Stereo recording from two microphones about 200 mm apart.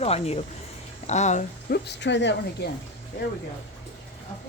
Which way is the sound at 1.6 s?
55° left (ahead or behind).